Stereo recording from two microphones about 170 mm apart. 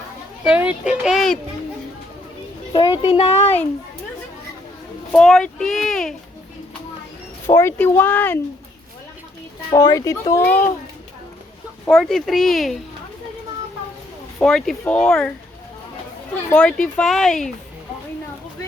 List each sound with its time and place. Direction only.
0.4 s speech: 5° right (ahead or behind)
2.7 s speech: 30° left (ahead or behind)
5.1 s speech: 5° left (ahead or behind)
7.4 s speech: 15° left (ahead or behind)
9.7 s speech: 20° left (ahead or behind)
11.9 s speech: centre (ahead or behind)
14.3 s speech: centre (ahead or behind)
16.5 s speech: 5° left (ahead or behind)